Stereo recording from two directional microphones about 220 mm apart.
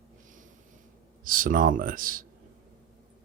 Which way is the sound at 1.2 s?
40° right (ahead or behind).